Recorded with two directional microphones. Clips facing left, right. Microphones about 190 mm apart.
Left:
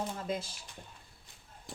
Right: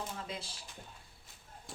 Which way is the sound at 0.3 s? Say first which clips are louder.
Left 8 dB; 45° left (ahead or behind).